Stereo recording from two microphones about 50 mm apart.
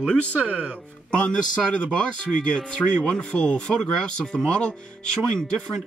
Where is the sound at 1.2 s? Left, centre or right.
Left.